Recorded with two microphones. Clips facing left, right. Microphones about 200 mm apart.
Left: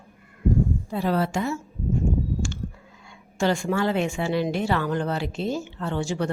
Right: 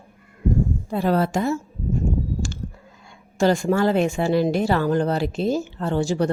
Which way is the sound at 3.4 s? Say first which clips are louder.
Right 5 dB; 40° right (ahead or behind).